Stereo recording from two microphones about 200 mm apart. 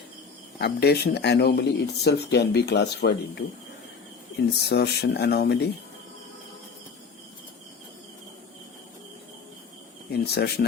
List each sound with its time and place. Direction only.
0.6 s speech: 55° left (ahead or behind)
4.7 s speech: 55° left (ahead or behind)
10.1 s speech: 55° left (ahead or behind)